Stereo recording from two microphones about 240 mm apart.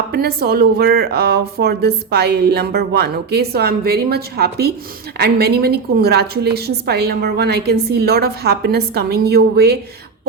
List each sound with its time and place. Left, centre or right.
0.1 s speech: right